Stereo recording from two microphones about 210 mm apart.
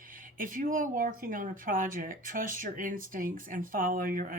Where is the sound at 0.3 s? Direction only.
40° right (ahead or behind).